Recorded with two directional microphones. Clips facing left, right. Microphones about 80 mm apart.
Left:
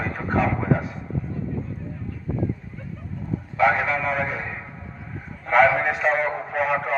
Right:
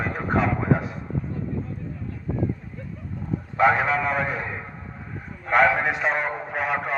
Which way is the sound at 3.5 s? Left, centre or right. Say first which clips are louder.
Right 1 dB; right.